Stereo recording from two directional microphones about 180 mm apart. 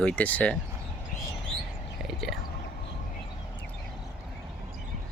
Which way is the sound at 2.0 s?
Centre (ahead or behind).